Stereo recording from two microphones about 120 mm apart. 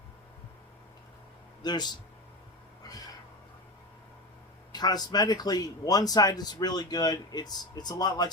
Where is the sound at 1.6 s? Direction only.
35° left (ahead or behind).